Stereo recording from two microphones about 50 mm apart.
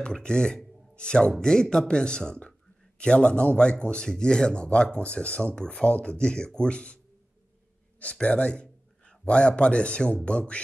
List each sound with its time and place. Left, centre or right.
0.0 s speech: centre
8.0 s a man's voice: left